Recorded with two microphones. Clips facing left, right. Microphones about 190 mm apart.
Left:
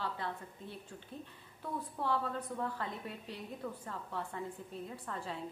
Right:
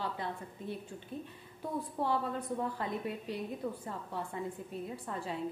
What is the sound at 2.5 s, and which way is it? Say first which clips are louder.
Speech: right 5 dB; 15° right (ahead or behind).